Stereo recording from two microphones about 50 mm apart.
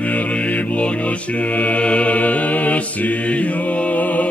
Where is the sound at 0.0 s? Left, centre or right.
Left.